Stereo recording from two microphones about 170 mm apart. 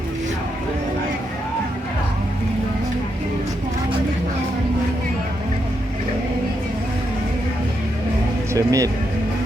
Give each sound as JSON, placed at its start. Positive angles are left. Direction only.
{"t": 8.5, "sound": "speech", "side_deg": -20}